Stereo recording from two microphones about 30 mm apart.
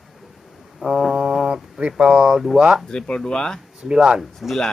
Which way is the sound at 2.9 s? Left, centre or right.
Left.